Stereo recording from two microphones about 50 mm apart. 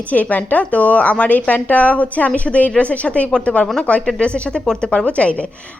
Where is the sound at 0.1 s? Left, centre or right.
Left.